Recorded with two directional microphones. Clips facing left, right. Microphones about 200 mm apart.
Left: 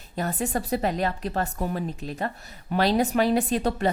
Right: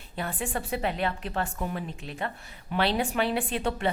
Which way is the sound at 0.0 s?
40° left (ahead or behind).